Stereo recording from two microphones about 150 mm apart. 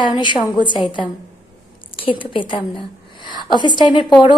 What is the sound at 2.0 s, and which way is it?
A woman's voice, 35° left (ahead or behind).